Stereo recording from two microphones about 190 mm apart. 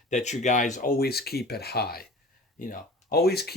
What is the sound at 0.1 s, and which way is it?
Speech, 35° left (ahead or behind).